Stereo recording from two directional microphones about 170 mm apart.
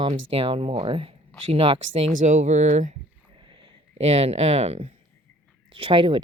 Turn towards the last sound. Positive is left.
turn(degrees=-30)  # may be behind; listen again after turning